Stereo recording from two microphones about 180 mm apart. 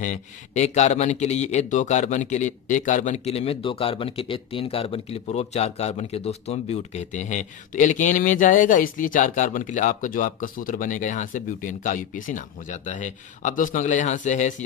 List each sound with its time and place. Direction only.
0.0 s speech: 40° left (ahead or behind)